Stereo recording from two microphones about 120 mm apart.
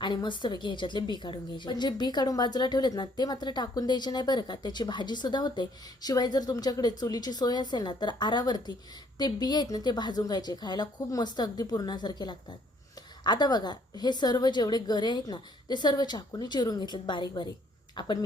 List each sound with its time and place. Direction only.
0.0 s speech: 40° left (ahead or behind)